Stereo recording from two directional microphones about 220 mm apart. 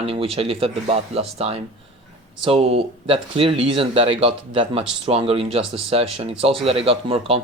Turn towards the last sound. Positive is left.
turn(degrees=-25)  # may be behind; listen again after turning